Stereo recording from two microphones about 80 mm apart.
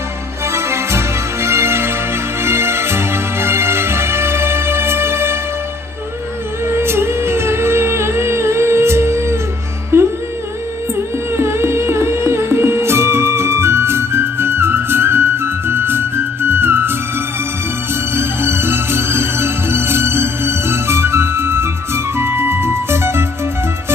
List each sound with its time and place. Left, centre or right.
0.4 s music: right
6.7 s music: right
9.9 s humming: right
10.9 s music: right
18.1 s music: right